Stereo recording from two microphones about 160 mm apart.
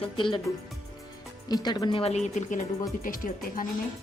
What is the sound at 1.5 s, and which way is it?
Speech, 25° left (ahead or behind).